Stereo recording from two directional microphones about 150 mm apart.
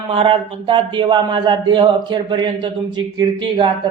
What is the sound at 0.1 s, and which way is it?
A man's voice, 40° right (ahead or behind).